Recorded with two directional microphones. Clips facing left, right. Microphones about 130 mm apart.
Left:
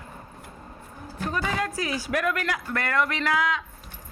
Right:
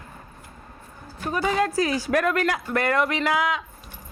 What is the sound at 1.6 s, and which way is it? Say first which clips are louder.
A woman's voice: right 6 dB; 35° right (ahead or behind).